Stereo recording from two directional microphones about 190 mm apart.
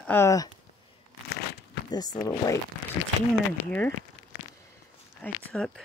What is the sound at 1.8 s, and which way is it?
Speech, 20° left (ahead or behind).